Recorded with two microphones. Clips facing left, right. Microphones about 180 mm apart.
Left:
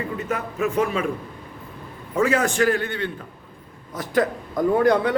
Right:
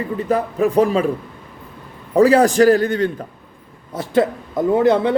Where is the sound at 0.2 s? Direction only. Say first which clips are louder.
Right 9 dB; 35° right (ahead or behind).